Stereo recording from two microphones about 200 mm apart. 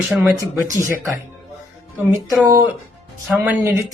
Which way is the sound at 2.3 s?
15° right (ahead or behind).